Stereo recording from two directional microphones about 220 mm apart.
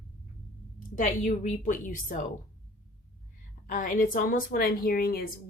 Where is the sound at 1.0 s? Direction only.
35° left (ahead or behind).